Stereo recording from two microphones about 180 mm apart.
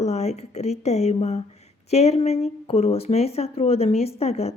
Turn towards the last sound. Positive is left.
turn(degrees=35)  # may be behind; listen again after turning